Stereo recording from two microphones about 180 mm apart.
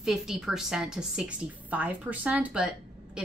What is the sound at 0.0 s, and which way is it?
A woman's voice, 5° right (ahead or behind).